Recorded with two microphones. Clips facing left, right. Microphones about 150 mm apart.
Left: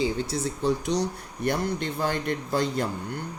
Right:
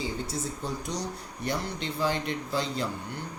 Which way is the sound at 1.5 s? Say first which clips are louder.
Left 5 dB; 50° left (ahead or behind).